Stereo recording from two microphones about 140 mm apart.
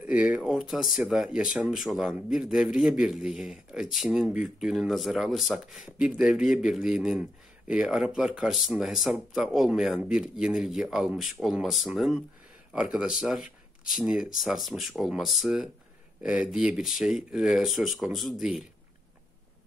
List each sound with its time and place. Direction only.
0.0 s speech: 10° right (ahead or behind)